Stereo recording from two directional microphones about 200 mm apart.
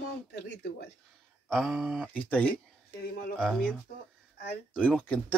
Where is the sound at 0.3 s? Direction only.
60° left (ahead or behind).